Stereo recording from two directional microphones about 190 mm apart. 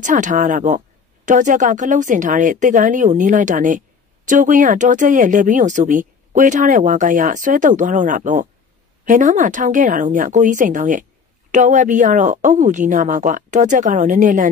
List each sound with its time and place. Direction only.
0.0 s speech: 40° right (ahead or behind)